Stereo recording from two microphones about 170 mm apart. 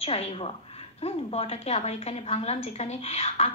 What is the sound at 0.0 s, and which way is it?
A woman's voice, 35° left (ahead or behind).